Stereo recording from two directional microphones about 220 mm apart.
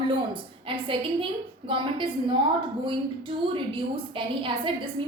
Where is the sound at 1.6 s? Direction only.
25° right (ahead or behind).